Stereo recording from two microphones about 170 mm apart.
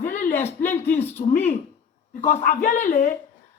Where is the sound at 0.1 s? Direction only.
45° left (ahead or behind).